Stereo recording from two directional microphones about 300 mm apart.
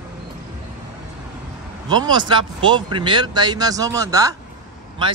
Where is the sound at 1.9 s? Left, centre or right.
Centre.